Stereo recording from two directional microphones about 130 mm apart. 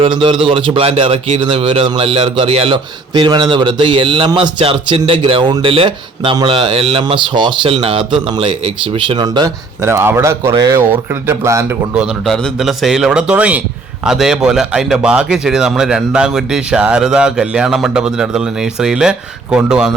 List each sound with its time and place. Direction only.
0.0 s a man's voice: 40° right (ahead or behind)
9.8 s speech: 20° right (ahead or behind)
11.9 s speech: centre (ahead or behind)